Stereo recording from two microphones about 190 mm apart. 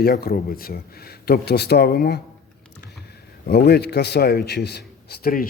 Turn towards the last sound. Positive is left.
turn(degrees=50)  # may be behind; listen again after turning